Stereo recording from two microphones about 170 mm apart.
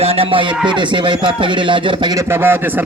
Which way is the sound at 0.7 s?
30° right (ahead or behind).